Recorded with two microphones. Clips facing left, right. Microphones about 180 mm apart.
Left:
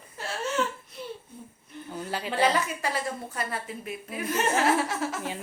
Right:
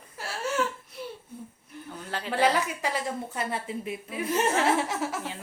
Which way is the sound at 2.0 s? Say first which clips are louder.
Left 1 dB; 10° left (ahead or behind).